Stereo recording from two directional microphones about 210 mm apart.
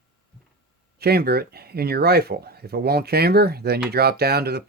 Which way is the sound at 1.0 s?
50° right (ahead or behind).